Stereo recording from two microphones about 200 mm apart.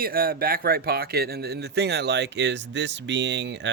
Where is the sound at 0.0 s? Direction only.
45° right (ahead or behind).